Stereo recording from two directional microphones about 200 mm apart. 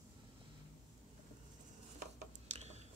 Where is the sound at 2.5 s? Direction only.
35° right (ahead or behind).